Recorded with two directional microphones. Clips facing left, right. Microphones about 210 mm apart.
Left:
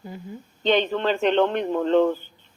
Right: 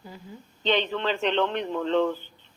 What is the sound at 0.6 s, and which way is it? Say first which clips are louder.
A man's voice: left 4 dB; 45° left (ahead or behind).